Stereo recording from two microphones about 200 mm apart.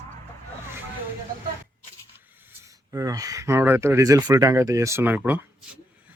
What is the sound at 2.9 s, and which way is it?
A man's voice, 15° right (ahead or behind).